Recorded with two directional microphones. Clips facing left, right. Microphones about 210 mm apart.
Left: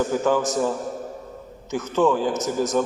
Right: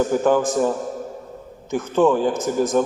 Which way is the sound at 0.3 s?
50° right (ahead or behind).